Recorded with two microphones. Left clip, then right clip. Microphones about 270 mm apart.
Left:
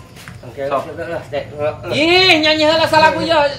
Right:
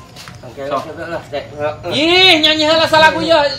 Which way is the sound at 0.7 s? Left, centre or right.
Centre.